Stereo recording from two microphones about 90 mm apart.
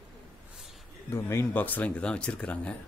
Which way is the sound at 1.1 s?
30° left (ahead or behind).